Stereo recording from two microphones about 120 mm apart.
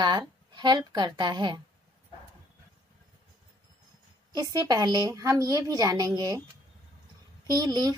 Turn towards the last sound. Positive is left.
turn(degrees=-35)  # may be behind; listen again after turning